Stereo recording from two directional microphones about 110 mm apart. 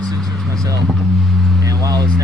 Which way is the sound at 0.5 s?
35° right (ahead or behind).